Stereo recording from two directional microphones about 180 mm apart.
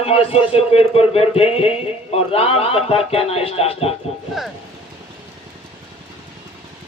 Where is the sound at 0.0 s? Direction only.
30° left (ahead or behind).